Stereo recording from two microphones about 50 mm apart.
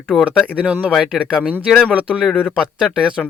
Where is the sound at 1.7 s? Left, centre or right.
Centre.